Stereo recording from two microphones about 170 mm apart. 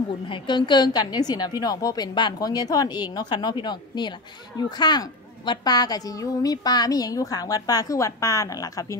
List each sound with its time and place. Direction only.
0.3 s a woman's voice: 25° left (ahead or behind)